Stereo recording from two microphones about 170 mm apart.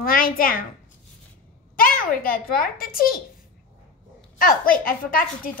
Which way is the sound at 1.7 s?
60° left (ahead or behind).